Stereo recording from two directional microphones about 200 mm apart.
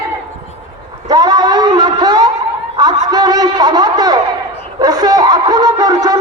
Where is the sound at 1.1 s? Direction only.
20° right (ahead or behind).